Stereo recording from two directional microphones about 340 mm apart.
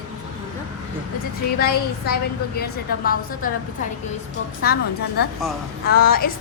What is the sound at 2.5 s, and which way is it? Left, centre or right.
Speech, left.